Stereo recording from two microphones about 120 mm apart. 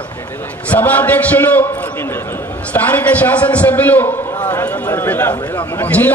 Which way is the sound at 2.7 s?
15° left (ahead or behind).